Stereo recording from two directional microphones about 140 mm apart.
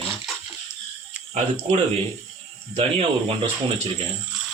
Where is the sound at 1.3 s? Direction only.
50° right (ahead or behind).